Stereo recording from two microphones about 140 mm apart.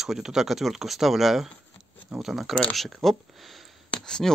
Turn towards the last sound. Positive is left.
turn(degrees=5)  # may be behind; listen again after turning